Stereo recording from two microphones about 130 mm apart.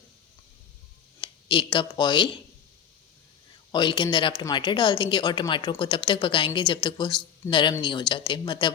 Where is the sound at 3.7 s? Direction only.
35° left (ahead or behind).